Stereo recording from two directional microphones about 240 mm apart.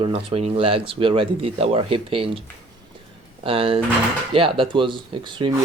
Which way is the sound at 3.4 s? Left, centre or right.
Right.